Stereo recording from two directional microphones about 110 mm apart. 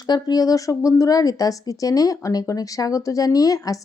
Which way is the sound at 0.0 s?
40° left (ahead or behind).